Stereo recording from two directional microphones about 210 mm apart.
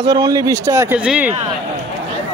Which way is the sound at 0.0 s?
20° right (ahead or behind).